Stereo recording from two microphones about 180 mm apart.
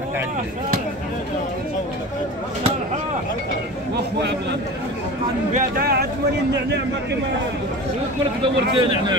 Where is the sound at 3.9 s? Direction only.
70° right (ahead or behind).